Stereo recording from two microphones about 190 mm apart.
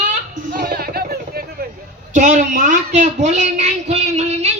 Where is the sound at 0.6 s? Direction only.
55° right (ahead or behind).